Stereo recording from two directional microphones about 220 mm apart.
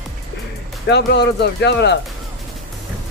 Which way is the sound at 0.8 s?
50° left (ahead or behind).